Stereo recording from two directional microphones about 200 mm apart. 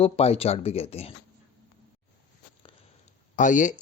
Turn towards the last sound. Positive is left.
turn(degrees=40)  # may be behind; listen again after turning